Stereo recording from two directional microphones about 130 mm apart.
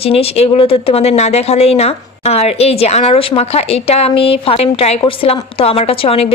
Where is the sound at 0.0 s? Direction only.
50° left (ahead or behind).